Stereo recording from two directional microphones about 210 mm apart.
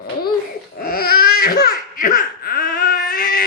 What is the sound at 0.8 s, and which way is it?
Laughter, 45° left (ahead or behind).